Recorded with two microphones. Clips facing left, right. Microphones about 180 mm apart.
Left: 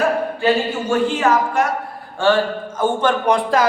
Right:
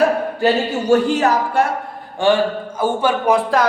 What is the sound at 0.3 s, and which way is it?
A man's voice, 40° right (ahead or behind).